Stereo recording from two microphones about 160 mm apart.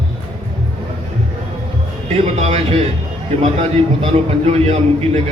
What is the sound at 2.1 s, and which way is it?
A man's voice, 40° right (ahead or behind).